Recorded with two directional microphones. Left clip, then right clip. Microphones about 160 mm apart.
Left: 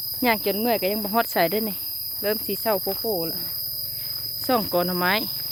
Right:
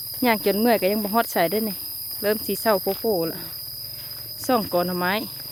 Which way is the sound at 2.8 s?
55° right (ahead or behind).